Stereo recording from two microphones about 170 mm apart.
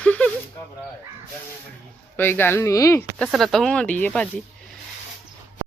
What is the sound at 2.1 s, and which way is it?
Speech, 10° left (ahead or behind).